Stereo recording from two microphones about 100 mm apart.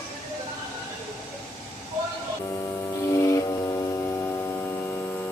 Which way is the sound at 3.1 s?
30° left (ahead or behind).